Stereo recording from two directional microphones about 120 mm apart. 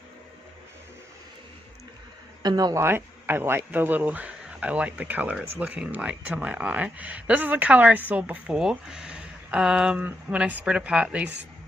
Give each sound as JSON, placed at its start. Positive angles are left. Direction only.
{"t": 2.4, "sound": "speech", "side_deg": -35}
{"t": 2.7, "sound": "speech", "side_deg": -20}